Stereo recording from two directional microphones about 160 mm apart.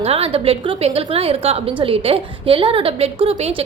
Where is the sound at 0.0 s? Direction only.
40° right (ahead or behind).